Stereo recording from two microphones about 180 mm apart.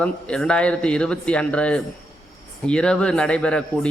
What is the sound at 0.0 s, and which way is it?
A man's voice, 5° left (ahead or behind).